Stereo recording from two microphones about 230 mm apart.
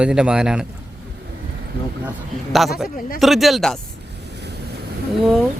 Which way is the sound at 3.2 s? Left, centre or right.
Centre.